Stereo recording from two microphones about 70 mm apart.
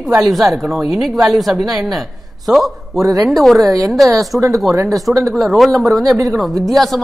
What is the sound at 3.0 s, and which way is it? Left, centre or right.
Speech, right.